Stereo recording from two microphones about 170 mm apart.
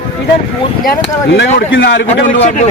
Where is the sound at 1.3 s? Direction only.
90° left.